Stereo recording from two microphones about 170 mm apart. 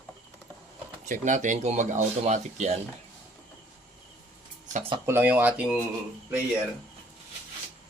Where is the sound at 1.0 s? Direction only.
50° right (ahead or behind).